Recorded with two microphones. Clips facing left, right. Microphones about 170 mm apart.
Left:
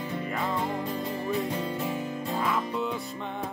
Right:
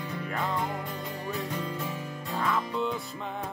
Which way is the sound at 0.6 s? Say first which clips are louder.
Left 3 dB; 25° left (ahead or behind).